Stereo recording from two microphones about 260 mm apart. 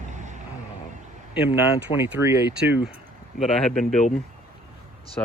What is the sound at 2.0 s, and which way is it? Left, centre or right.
Speech, centre.